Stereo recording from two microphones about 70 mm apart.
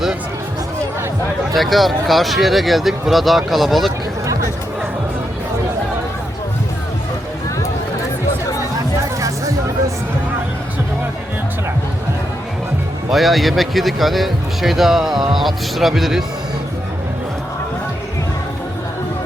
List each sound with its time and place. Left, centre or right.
1.5 s speech: centre
9.2 s music: right
13.1 s speech: centre